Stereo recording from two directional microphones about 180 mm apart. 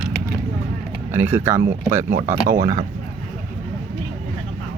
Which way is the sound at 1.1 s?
10° right (ahead or behind).